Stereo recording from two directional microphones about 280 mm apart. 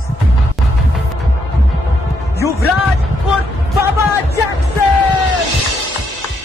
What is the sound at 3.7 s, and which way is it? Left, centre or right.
Speech, centre.